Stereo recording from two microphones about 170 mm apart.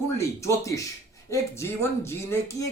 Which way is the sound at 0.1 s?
15° left (ahead or behind).